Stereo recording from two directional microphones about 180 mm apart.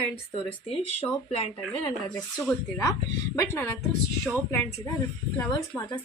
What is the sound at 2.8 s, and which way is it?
A woman's voice, 20° left (ahead or behind).